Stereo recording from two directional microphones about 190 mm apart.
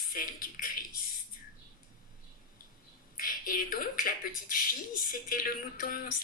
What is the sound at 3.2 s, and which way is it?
Speech, 50° left (ahead or behind).